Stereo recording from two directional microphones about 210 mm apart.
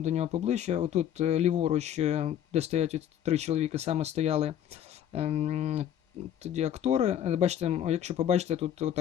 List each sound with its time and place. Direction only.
0.0 s speech: 30° right (ahead or behind)